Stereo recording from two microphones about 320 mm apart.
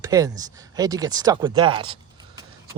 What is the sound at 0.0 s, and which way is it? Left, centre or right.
Speech, centre.